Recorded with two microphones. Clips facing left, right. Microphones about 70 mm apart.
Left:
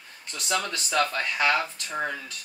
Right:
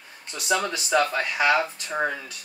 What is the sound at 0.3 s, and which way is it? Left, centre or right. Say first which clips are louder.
Speech: right 4 dB; centre.